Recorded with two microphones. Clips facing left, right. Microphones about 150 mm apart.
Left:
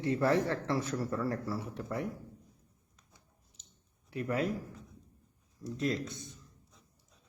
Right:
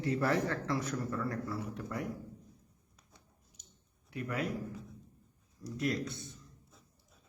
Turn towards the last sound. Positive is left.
turn(degrees=20)  # may be behind; listen again after turning